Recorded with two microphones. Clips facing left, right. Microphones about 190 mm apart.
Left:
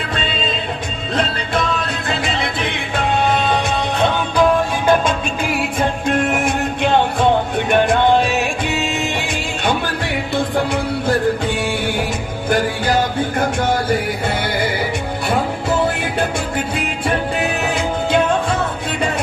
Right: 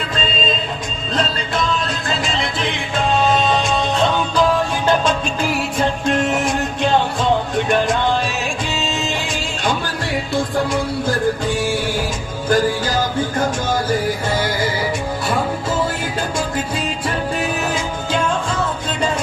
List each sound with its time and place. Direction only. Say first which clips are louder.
1.1 s music: left 1 dB; 60° left (ahead or behind)
15.8 s music: left 3 dB; 60° left (ahead or behind)